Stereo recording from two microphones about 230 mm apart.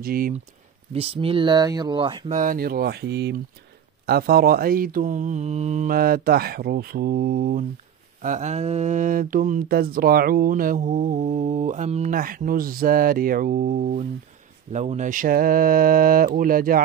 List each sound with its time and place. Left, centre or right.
0.0 s speech: right
0.9 s speech: right
2.3 s speech: right